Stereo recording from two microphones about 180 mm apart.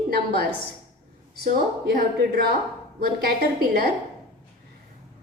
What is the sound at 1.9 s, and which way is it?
A woman's voice, 60° right (ahead or behind).